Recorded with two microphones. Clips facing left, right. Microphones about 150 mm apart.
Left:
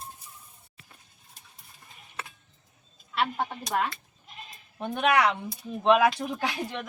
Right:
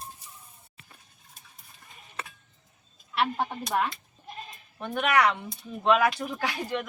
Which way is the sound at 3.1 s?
5° right (ahead or behind).